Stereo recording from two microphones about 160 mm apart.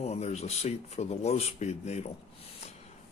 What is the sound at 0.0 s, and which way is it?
Speech, 40° left (ahead or behind).